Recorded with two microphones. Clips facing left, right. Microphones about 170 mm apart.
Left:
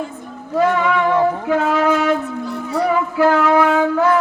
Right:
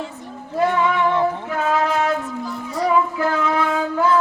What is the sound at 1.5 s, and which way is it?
Music, 90° left.